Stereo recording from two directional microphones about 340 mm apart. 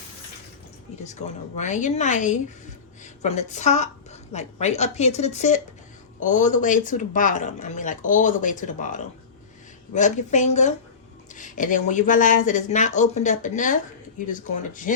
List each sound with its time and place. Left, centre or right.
1.0 s a woman's voice: centre